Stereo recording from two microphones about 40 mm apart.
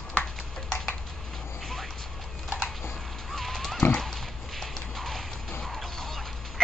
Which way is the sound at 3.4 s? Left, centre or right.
Centre.